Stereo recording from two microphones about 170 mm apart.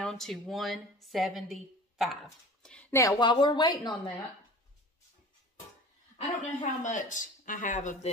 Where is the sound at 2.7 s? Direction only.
10° left (ahead or behind).